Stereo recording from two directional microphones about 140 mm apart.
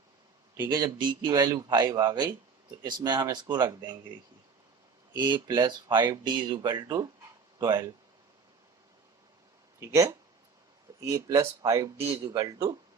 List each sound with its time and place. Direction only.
0.5 s a man's voice: 25° right (ahead or behind)
5.1 s a man's voice: 30° right (ahead or behind)
9.8 s a man's voice: 20° right (ahead or behind)